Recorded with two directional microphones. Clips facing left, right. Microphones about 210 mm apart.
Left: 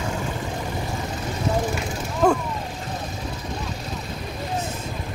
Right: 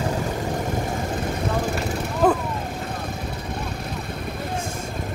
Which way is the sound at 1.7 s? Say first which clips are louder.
Right 2 dB; 5° right (ahead or behind).